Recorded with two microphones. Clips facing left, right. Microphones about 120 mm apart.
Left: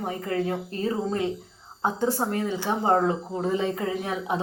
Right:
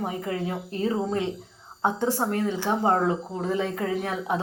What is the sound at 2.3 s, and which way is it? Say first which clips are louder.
Speech: right 1 dB; 10° left (ahead or behind).